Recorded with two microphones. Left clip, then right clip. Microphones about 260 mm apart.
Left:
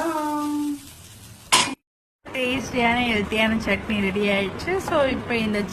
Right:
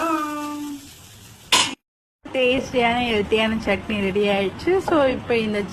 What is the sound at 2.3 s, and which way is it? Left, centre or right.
A woman's voice, centre.